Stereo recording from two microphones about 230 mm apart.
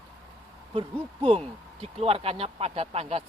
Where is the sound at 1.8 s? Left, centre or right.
Right.